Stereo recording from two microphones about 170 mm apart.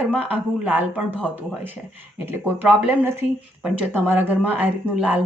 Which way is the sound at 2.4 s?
10° right (ahead or behind).